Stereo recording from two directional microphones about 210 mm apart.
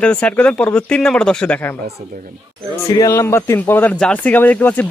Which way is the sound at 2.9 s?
15° left (ahead or behind).